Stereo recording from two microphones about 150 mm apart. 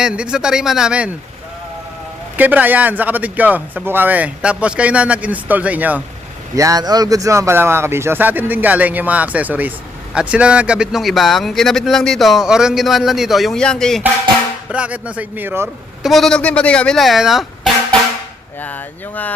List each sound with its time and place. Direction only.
0.0 s speech: 5° right (ahead or behind)
2.3 s a man's voice: 10° right (ahead or behind)
6.6 s a man's voice: 25° right (ahead or behind); by 14.0 s 5° left (ahead or behind)
14.7 s a man's voice: 10° right (ahead or behind)
16.0 s speech: centre (ahead or behind)
18.6 s speech: 10° left (ahead or behind)